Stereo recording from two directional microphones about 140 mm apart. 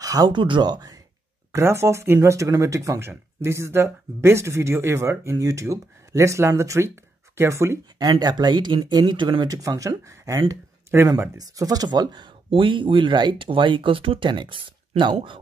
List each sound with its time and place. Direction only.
0.0 s speech: 25° right (ahead or behind)
1.5 s speech: 20° right (ahead or behind); by 15.1 s 35° right (ahead or behind)